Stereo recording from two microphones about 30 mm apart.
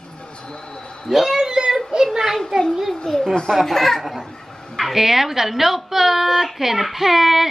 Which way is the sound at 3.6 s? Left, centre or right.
Centre.